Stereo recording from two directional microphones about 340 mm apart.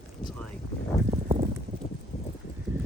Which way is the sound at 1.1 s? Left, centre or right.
Centre.